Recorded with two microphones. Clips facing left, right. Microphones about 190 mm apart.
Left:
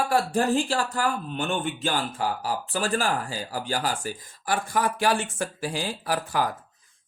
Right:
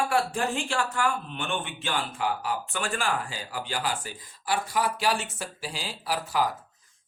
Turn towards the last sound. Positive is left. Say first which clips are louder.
# left 1 dB
turn(degrees=50)  # may be behind; listen again after turning